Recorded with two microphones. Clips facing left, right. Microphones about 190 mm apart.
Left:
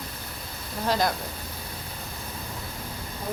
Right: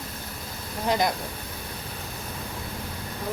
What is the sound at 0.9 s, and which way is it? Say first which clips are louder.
Speech: right 1 dB; 20° right (ahead or behind).